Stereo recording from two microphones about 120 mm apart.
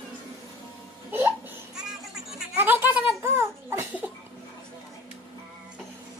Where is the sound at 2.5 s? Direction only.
15° right (ahead or behind).